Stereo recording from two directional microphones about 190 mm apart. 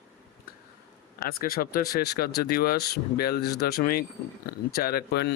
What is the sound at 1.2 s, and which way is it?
Speech, 50° left (ahead or behind).